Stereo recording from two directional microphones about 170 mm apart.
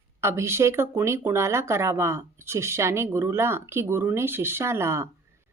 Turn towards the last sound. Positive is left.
turn(degrees=-15)  # may be behind; listen again after turning